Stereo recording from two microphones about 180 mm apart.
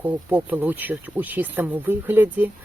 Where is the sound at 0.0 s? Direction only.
10° right (ahead or behind).